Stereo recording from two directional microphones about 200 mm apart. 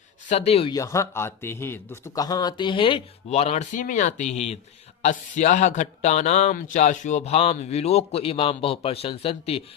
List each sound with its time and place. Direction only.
0.3 s a man's voice: 30° left (ahead or behind)
0.7 s a man's voice: 15° left (ahead or behind)